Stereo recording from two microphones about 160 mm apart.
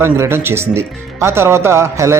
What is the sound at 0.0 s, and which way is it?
Speech, 15° right (ahead or behind).